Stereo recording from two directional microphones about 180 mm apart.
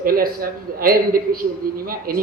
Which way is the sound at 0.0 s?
55° right (ahead or behind).